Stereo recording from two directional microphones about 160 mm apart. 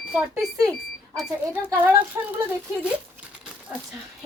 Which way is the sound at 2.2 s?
15° right (ahead or behind).